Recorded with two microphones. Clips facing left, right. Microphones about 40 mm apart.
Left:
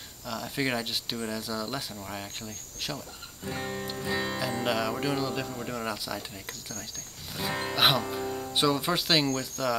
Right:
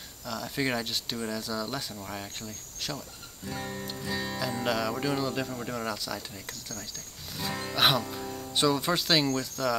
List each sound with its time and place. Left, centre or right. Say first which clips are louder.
0.3 s speech: even; centre
3.4 s music: left 2 dB; left
4.4 s speech: left 1 dB; centre
7.7 s speech: even; centre